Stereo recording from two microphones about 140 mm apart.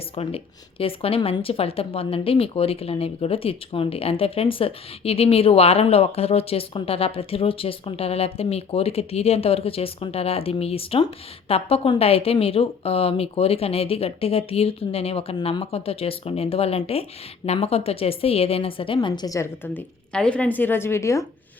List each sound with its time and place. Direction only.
0.2 s speech: 45° left (ahead or behind)
18.9 s a woman's voice: 30° left (ahead or behind)